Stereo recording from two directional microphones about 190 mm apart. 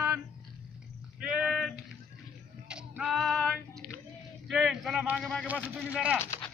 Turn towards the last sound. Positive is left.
turn(degrees=10)  # may be behind; listen again after turning